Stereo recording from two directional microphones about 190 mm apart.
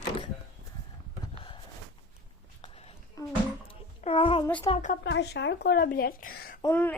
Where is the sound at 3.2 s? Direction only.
15° left (ahead or behind).